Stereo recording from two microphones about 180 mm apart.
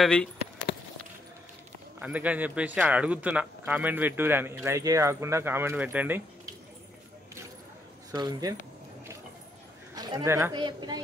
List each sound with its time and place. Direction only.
0.0 s speech: 5° left (ahead or behind)
2.0 s a man's voice: 5° right (ahead or behind)
8.1 s speech: 20° right (ahead or behind)
9.9 s speech: 20° right (ahead or behind)
10.5 s speech: 25° right (ahead or behind)